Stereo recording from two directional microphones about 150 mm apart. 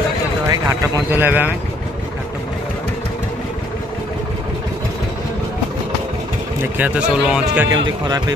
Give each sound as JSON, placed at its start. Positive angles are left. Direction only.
{"t": 0.5, "sound": "speech", "side_deg": -15}
{"t": 6.6, "sound": "speech", "side_deg": -10}
{"t": 7.7, "sound": "a man's voice", "side_deg": -25}